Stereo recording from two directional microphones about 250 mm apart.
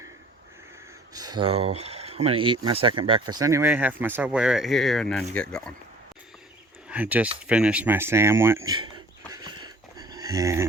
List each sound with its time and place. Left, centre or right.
1.1 s speech: centre
6.8 s speech: centre
9.3 s a sound: centre